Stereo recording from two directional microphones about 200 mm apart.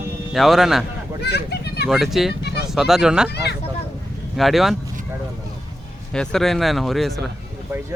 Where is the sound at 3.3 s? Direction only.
55° left (ahead or behind).